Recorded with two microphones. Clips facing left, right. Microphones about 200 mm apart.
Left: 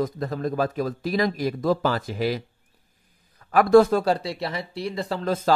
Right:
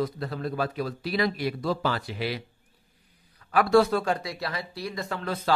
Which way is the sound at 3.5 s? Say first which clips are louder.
Left 5 dB; 50° left (ahead or behind).